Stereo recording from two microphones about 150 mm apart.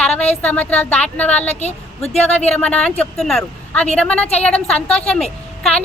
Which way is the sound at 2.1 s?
45° left (ahead or behind).